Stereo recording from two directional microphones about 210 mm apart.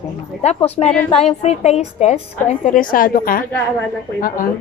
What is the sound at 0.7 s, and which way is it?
Speech, 5° left (ahead or behind).